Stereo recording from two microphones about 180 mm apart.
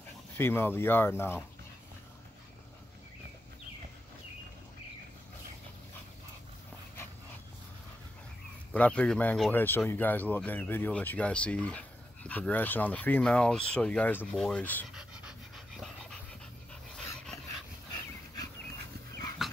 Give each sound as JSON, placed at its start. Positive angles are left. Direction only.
{"t": 0.4, "sound": "speech", "side_deg": 10}
{"t": 8.7, "sound": "speech", "side_deg": 5}
{"t": 15.0, "sound": "dog", "side_deg": 0}
{"t": 19.4, "sound": "dog", "side_deg": 0}